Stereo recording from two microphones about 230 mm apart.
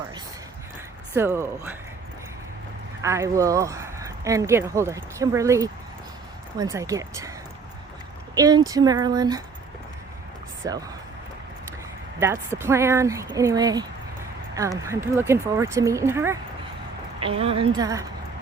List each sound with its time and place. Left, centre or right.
1.1 s speech: centre
3.0 s speech: centre
8.4 s speech: centre
12.2 s speech: centre
17.2 s a woman's voice: right